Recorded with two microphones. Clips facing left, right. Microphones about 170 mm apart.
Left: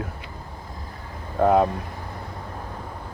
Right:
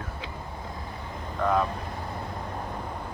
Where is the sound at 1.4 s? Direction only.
50° left (ahead or behind).